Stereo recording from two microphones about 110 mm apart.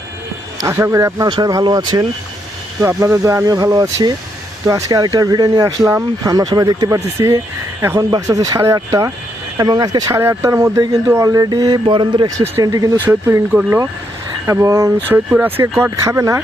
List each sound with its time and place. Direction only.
0.6 s speech: 25° right (ahead or behind)
10.2 s speech: 25° right (ahead or behind)
13.1 s speech: 20° right (ahead or behind)